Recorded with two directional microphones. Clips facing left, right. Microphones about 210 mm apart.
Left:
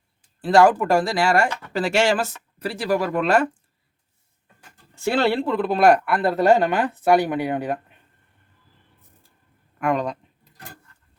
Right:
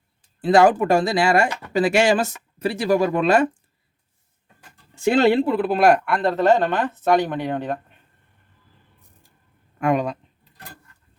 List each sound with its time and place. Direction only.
0.4 s speech: 20° right (ahead or behind)
5.2 s speech: 15° right (ahead or behind)
5.5 s speech: 5° right (ahead or behind)
9.9 s speech: 10° right (ahead or behind)